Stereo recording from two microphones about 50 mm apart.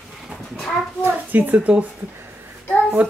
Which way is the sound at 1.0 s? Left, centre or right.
Right.